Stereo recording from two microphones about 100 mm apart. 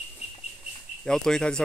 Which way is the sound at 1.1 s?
5° left (ahead or behind).